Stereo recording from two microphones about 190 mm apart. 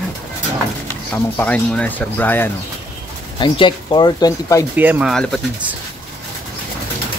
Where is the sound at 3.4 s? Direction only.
25° left (ahead or behind).